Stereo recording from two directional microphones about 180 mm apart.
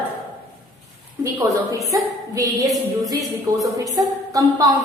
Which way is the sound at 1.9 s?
20° right (ahead or behind).